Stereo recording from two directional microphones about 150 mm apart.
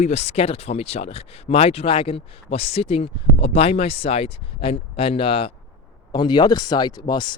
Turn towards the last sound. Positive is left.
turn(degrees=30)  # may be behind; listen again after turning